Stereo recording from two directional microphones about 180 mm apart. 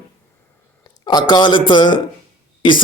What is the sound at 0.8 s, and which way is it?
Speech, 20° left (ahead or behind).